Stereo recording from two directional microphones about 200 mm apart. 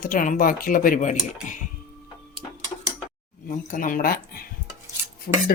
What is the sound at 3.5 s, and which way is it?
Speech, 40° left (ahead or behind).